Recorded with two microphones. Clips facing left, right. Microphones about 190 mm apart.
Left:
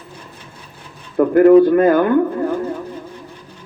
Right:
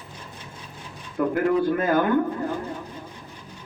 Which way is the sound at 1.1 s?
55° left (ahead or behind).